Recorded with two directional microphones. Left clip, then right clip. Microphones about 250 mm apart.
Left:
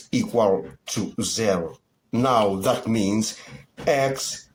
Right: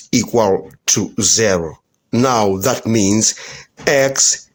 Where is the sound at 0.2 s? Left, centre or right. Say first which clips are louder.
Right 5 dB; right.